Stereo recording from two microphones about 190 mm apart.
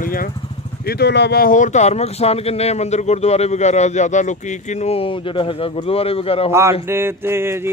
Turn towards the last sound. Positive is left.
turn(degrees=-15)  # may be behind; listen again after turning